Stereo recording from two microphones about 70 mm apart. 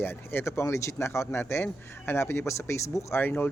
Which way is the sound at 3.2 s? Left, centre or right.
Left.